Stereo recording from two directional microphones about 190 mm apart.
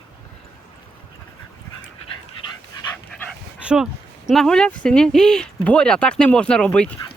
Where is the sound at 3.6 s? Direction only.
5° right (ahead or behind).